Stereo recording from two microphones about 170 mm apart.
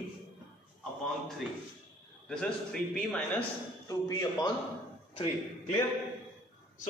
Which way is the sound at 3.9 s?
20° left (ahead or behind).